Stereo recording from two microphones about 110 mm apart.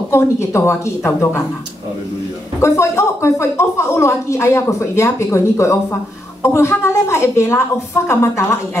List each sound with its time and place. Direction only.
0.1 s a woman's voice: 25° left (ahead or behind)
2.6 s a woman's voice: 25° left (ahead or behind)